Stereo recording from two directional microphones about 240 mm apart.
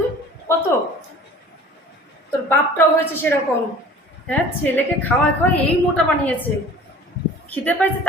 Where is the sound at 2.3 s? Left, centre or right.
Centre.